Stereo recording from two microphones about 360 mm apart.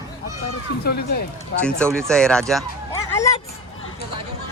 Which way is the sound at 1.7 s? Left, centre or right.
Centre.